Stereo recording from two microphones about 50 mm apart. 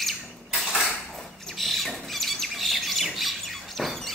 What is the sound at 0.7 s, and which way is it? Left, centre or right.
Bird, centre.